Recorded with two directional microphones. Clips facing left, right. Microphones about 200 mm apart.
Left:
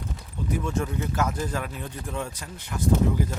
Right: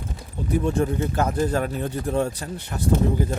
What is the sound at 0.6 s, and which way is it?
Speech, 35° right (ahead or behind).